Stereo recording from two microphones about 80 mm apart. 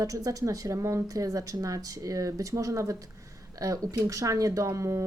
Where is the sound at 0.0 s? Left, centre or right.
Right.